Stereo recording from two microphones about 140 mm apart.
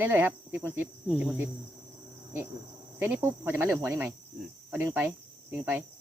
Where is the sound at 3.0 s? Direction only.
15° right (ahead or behind).